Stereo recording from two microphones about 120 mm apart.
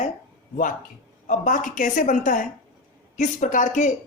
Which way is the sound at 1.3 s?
90° left.